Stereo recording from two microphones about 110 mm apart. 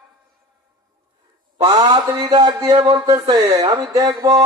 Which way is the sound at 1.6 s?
35° right (ahead or behind).